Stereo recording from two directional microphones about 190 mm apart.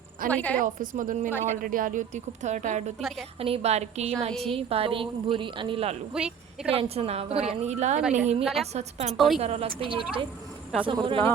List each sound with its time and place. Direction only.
0.3 s a woman's voice: 10° left (ahead or behind)
0.6 s a woman's voice: 45° right (ahead or behind)
6.1 s speech: 5° right (ahead or behind)
6.7 s a woman's voice: 30° right (ahead or behind)
9.1 s a woman's voice: centre (ahead or behind)
9.4 s a woman's voice: 30° right (ahead or behind)